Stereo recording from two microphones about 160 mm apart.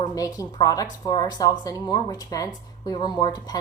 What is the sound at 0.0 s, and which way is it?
A woman's voice, 20° left (ahead or behind).